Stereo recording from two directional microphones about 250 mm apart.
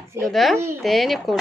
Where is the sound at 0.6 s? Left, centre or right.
Centre.